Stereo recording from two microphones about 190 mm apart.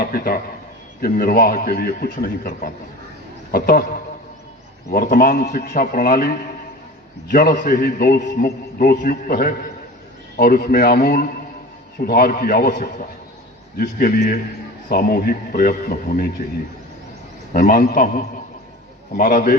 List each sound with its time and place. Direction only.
0.0 s a man's voice: 50° left (ahead or behind)
4.9 s a man's voice: 50° left (ahead or behind)
17.5 s a man's voice: 50° left (ahead or behind)